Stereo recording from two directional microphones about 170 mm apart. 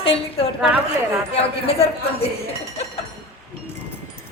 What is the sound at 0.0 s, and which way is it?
A woman's voice, 35° left (ahead or behind).